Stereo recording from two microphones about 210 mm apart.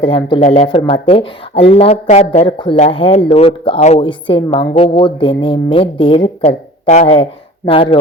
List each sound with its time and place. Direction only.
0.0 s speech: 25° left (ahead or behind)